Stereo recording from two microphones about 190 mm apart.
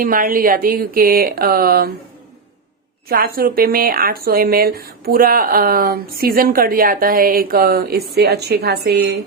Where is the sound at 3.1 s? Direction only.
50° right (ahead or behind).